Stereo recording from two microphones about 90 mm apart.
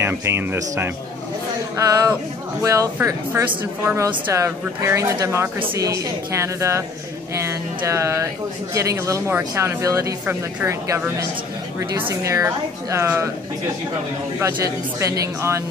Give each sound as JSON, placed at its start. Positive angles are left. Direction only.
{"t": 0.0, "sound": "speech", "side_deg": -25}
{"t": 1.8, "sound": "speech", "side_deg": -40}
{"t": 12.1, "sound": "speech", "side_deg": -35}
{"t": 14.4, "sound": "speech", "side_deg": -35}